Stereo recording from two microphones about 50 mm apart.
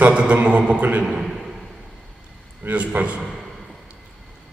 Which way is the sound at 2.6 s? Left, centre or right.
Right.